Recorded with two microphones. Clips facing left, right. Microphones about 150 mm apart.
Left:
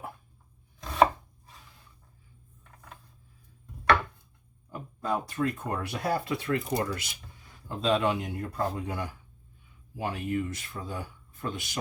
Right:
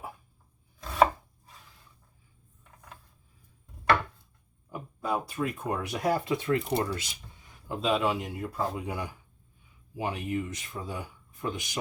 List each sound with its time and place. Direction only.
0.8 s chopping: centre (ahead or behind)
4.7 s speech: 10° right (ahead or behind)
7.8 s speech: 5° right (ahead or behind)